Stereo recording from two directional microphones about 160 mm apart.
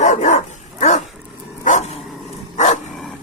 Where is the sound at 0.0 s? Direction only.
50° left (ahead or behind).